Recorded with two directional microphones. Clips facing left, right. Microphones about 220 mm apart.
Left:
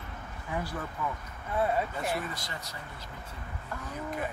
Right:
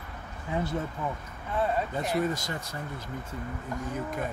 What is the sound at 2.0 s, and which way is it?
Speech, 45° right (ahead or behind).